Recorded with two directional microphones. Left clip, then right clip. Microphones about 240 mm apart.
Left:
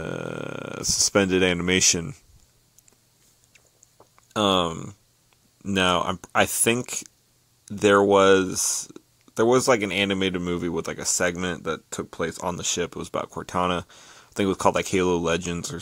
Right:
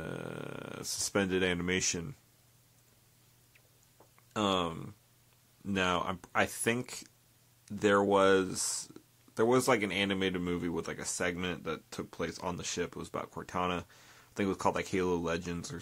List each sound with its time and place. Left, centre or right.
0.0 s speech: left
4.3 s speech: left